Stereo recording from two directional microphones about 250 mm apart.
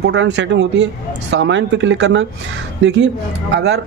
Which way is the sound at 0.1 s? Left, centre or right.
Right.